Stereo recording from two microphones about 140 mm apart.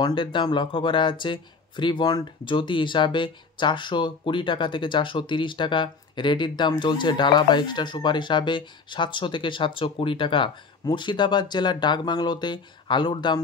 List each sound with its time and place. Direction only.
0.0 s speech: 35° left (ahead or behind)